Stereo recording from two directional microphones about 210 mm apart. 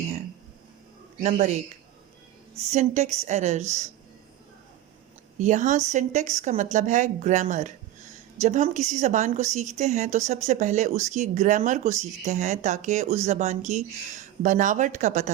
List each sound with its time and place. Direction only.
1.2 s speech: 35° right (ahead or behind)
5.4 s speech: 35° right (ahead or behind)